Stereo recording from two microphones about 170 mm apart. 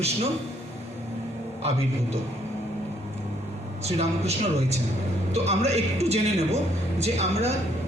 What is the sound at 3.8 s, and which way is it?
A man's voice, 40° right (ahead or behind).